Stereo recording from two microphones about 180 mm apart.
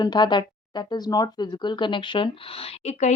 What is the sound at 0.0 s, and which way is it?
Speech, 25° left (ahead or behind).